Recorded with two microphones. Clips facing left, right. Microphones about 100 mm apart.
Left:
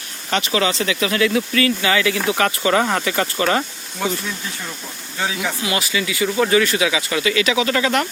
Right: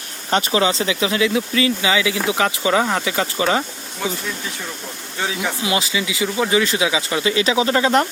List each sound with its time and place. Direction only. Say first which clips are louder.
0.3 s speech: right 2 dB; 30° right (ahead or behind)
0.9 s speech: even; 20° right (ahead or behind)
5.4 s speech: right 4 dB; 20° right (ahead or behind)